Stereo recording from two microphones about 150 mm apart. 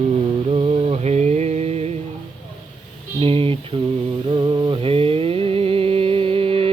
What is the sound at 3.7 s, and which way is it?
Mantra, 30° right (ahead or behind).